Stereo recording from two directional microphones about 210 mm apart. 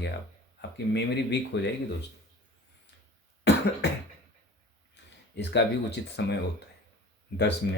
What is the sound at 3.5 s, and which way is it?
Cough, 55° left (ahead or behind).